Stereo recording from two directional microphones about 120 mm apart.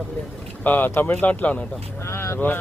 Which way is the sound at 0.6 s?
15° left (ahead or behind).